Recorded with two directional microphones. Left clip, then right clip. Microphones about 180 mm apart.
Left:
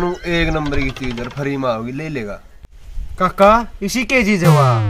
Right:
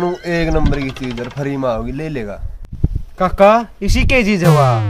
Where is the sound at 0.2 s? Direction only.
25° right (ahead or behind).